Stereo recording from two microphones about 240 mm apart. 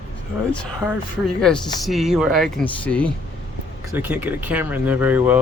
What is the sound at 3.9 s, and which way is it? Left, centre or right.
Speech, centre.